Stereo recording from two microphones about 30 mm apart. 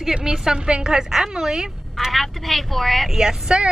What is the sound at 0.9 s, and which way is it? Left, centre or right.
Speech, right.